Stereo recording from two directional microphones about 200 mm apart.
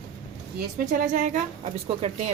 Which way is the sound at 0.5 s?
45° right (ahead or behind).